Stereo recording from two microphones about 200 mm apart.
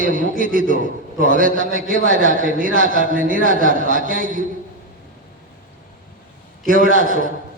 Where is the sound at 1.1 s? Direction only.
45° right (ahead or behind).